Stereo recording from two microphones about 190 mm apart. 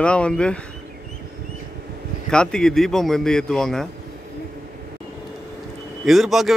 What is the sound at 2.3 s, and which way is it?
Speech, 5° left (ahead or behind).